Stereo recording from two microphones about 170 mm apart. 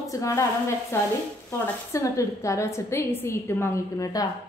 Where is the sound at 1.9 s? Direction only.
20° left (ahead or behind).